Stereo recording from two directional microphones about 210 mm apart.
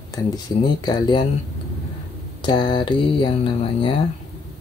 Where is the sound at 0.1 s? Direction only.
15° left (ahead or behind).